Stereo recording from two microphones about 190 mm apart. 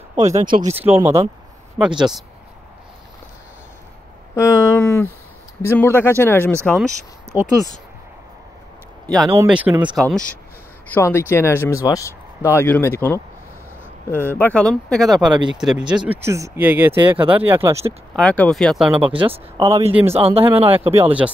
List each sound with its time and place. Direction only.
0.3 s speech: 40° right (ahead or behind)
0.7 s speech: 10° right (ahead or behind)
4.4 s speech: 10° left (ahead or behind)
9.0 s speech: centre (ahead or behind)
9.9 s speech: 5° left (ahead or behind)
16.1 s speech: 15° right (ahead or behind)
18.1 s speech: 5° left (ahead or behind)
19.0 s speech: 30° right (ahead or behind)
19.9 s speech: 10° right (ahead or behind)
20.2 s speech: 30° right (ahead or behind)